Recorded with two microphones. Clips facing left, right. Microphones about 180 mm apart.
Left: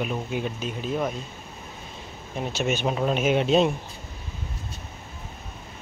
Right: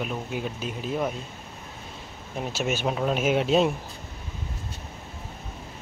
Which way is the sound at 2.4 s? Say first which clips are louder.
Left 2 dB; 5° right (ahead or behind).